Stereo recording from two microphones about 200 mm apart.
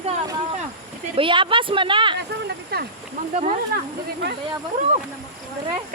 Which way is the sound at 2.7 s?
50° right (ahead or behind).